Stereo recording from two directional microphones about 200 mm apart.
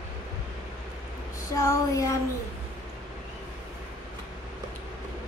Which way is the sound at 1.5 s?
15° left (ahead or behind).